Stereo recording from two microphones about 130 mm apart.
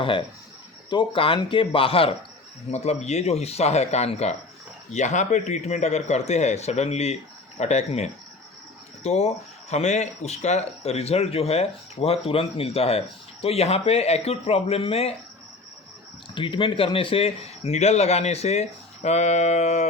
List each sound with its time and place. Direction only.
0.0 s speech: 40° left (ahead or behind)
16.3 s speech: 40° left (ahead or behind); by 19.9 s 65° left (ahead or behind)